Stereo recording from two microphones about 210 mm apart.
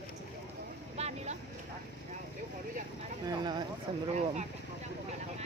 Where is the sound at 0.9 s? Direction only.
30° right (ahead or behind).